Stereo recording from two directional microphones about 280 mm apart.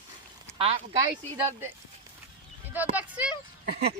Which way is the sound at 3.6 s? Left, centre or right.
Right.